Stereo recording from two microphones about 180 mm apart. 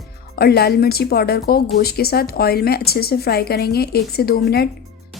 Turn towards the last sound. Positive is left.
turn(degrees=60)  # may be behind; listen again after turning